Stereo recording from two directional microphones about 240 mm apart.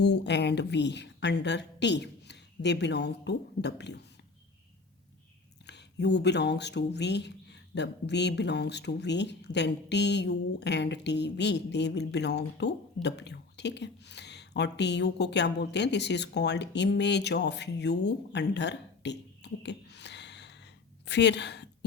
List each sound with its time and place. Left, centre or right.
0.0 s speech: left
5.6 s speech: left
21.0 s a sound: left